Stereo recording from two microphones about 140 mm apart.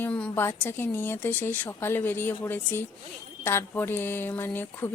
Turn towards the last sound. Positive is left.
turn(degrees=15)  # may be behind; listen again after turning